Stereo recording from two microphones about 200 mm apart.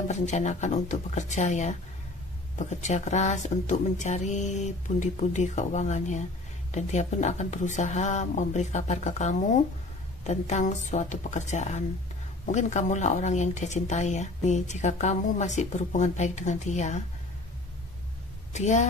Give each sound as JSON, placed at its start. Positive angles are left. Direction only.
{"t": 0.1, "sound": "speech", "side_deg": 35}
{"t": 18.5, "sound": "speech", "side_deg": 35}